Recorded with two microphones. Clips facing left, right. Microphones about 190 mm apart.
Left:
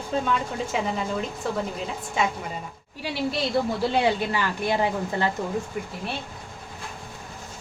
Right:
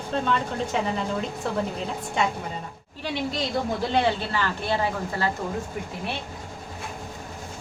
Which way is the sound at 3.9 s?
10° left (ahead or behind).